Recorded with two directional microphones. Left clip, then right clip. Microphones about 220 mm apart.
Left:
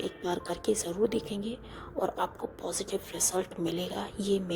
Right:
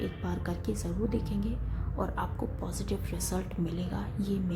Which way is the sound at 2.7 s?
35° left (ahead or behind).